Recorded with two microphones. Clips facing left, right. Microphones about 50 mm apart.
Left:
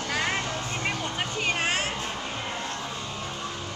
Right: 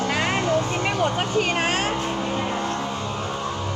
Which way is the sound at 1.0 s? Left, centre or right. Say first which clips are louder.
Right 9 dB; right.